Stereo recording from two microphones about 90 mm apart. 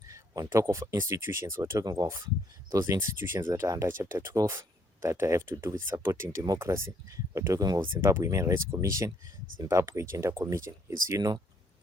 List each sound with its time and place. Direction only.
0.1 s speech: 35° right (ahead or behind)
1.8 s speech: 45° right (ahead or behind)
2.6 s speech: 35° right (ahead or behind)
7.8 s speech: 25° right (ahead or behind)